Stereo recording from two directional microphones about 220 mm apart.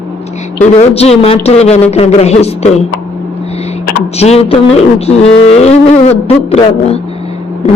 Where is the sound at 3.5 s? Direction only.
30° left (ahead or behind).